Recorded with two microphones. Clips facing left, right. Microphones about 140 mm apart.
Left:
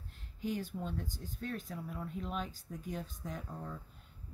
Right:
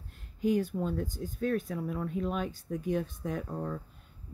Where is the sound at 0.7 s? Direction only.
65° right (ahead or behind).